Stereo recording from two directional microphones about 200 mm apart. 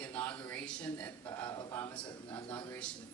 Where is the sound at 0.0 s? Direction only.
10° left (ahead or behind).